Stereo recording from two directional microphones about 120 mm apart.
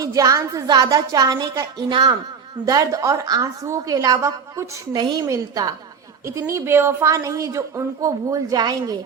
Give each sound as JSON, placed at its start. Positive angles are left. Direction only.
{"t": 0.0, "sound": "a woman's voice", "side_deg": -30}
{"t": 4.9, "sound": "a woman's voice", "side_deg": -35}